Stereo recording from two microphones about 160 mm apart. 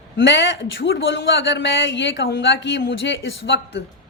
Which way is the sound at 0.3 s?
90° left.